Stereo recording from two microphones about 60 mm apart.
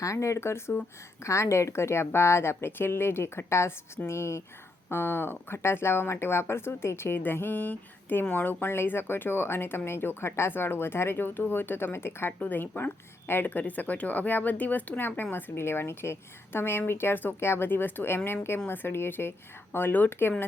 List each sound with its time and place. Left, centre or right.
0.0 s a woman's voice: left
4.9 s speech: left